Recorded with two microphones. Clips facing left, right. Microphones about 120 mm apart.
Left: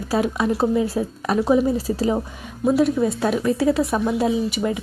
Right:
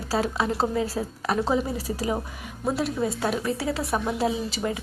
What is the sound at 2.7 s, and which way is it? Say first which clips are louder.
Speech: left 9 dB; 20° left (ahead or behind).